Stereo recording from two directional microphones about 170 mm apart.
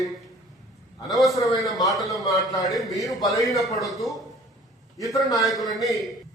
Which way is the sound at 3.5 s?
20° left (ahead or behind).